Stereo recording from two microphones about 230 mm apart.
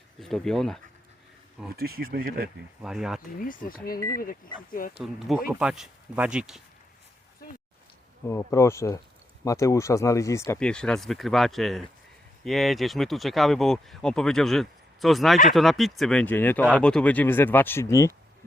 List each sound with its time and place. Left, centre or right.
0.2 s speech: centre
1.7 s speech: right
2.8 s speech: centre
3.4 s speech: left
5.5 s speech: centre
8.3 s speech: centre